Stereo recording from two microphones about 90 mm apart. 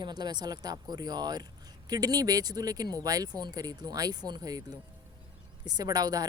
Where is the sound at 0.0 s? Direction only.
50° right (ahead or behind).